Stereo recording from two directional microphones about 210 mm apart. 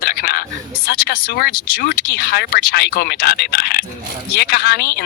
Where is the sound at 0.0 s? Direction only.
50° left (ahead or behind).